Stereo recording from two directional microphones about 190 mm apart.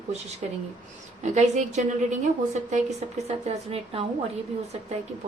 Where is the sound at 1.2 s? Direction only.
35° right (ahead or behind).